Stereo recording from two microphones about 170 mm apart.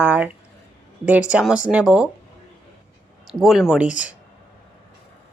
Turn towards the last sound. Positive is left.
turn(degrees=-5)  # may be behind; listen again after turning